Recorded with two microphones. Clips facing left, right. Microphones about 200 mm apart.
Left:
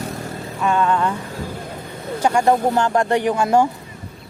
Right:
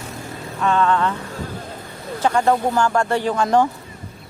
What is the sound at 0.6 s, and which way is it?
Speech, 10° left (ahead or behind).